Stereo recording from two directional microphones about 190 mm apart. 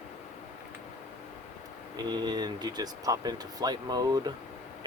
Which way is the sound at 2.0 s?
20° right (ahead or behind).